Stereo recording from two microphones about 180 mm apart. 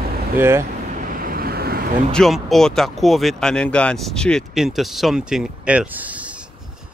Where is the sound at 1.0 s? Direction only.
50° right (ahead or behind).